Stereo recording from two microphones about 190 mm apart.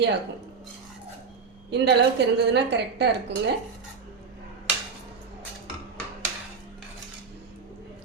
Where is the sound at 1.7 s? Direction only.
60° right (ahead or behind).